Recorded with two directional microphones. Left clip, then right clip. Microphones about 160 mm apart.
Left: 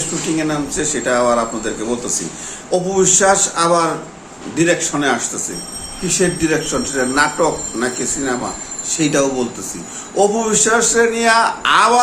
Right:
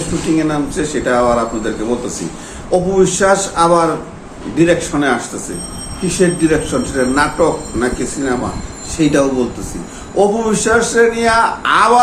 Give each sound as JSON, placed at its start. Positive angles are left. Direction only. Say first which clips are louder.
{"t": 0.3, "sound": "speech", "louder": "right 3 dB", "side_deg": 15}